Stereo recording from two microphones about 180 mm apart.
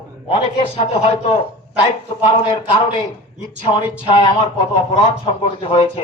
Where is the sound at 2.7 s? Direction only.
30° left (ahead or behind).